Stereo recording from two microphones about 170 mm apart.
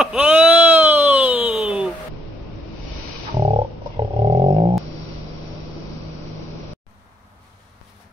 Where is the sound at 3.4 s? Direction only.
20° right (ahead or behind).